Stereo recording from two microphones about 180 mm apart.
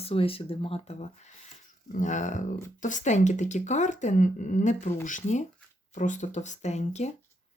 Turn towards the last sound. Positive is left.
turn(degrees=40)  # may be behind; listen again after turning